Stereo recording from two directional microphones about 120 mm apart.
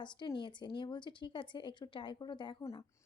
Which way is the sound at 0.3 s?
40° left (ahead or behind).